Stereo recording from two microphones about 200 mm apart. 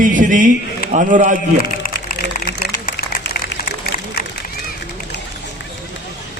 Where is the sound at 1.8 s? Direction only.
45° left (ahead or behind).